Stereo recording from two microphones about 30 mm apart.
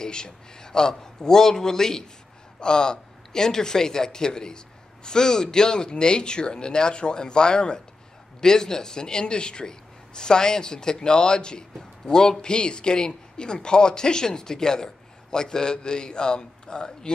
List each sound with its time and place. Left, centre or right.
0.0 s a man's voice: left